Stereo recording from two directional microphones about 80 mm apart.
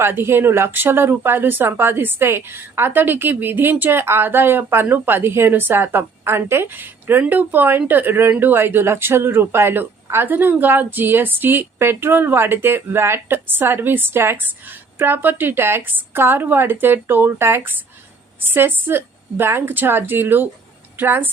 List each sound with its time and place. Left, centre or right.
0.0 s speech: right